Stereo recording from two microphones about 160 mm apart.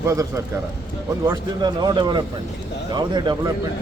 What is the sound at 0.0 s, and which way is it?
A man's voice, 20° right (ahead or behind).